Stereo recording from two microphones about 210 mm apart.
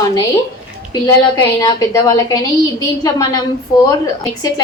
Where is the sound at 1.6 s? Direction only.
15° left (ahead or behind).